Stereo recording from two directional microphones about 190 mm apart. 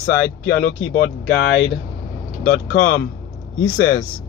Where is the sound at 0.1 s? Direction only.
55° left (ahead or behind).